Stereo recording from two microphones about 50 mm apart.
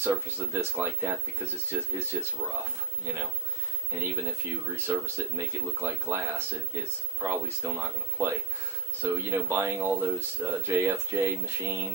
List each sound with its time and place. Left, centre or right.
0.0 s speech: right
3.9 s speech: right
5.1 s speech: right